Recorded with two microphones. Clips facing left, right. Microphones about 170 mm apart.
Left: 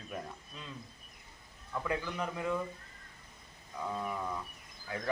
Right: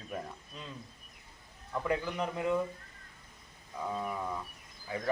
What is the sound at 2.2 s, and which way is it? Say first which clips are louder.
Speech: right 3 dB; 15° right (ahead or behind).